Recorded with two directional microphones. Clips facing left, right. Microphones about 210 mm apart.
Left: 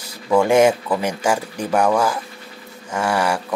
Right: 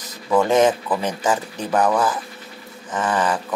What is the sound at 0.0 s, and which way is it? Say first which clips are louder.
Speech: left 2 dB; 10° left (ahead or behind).